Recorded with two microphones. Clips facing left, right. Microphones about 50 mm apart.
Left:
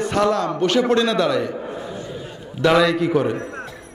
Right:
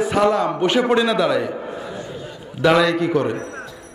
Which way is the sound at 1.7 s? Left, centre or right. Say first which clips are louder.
Even; right.